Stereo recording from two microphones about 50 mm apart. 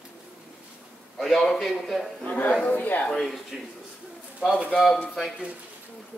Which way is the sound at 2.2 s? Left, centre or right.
Left.